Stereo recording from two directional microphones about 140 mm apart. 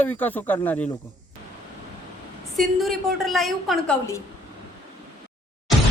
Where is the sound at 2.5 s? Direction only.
Centre (ahead or behind).